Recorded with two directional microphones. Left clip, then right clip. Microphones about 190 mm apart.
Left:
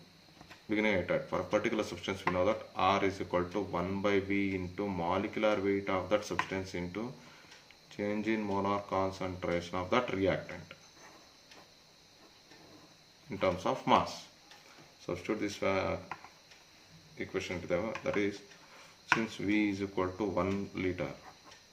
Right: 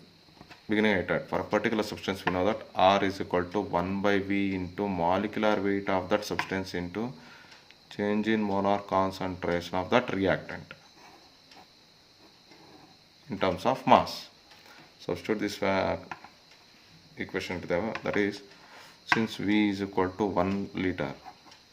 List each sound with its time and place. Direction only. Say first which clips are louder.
0.7 s speech: right 4 dB; 40° right (ahead or behind)
13.4 s speech: right 5 dB; 40° right (ahead or behind)
17.2 s speech: right 4 dB; 40° right (ahead or behind)